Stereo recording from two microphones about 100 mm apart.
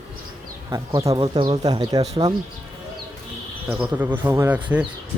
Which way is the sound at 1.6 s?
40° right (ahead or behind).